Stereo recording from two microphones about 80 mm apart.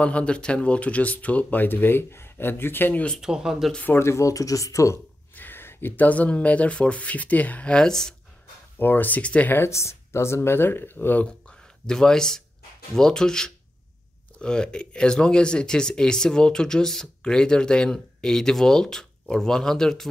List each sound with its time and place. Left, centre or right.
0.0 s speech: centre
3.2 s speech: centre
3.7 s speech: left
4.0 s speech: left
5.3 s speech: left; by 8.1 s centre
8.7 s speech: left
9.6 s speech: left
11.2 s speech: centre